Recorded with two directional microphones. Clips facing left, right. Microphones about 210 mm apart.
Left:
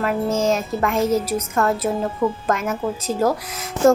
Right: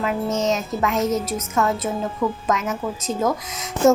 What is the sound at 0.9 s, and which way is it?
Speech, 30° left (ahead or behind).